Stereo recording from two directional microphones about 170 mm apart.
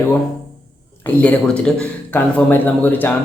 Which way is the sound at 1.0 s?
10° left (ahead or behind).